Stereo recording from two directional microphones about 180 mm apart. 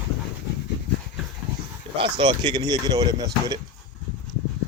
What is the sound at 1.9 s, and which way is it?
Speech, 30° right (ahead or behind).